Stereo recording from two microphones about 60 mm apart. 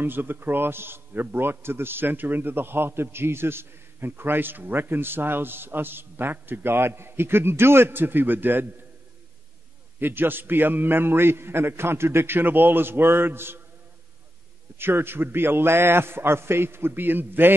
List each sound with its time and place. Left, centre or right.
0.0 s a man's voice: right
9.9 s a man's voice: right
14.8 s a man's voice: right